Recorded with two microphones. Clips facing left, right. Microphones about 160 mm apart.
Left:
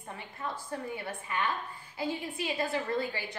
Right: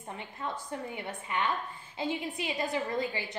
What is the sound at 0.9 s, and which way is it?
A woman's voice, 20° right (ahead or behind).